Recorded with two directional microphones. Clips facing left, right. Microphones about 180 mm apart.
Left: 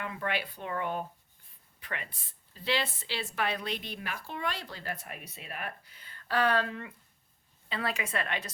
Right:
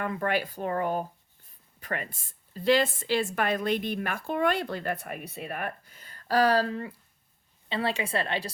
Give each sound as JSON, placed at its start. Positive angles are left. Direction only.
{"t": 0.0, "sound": "a woman's voice", "side_deg": -45}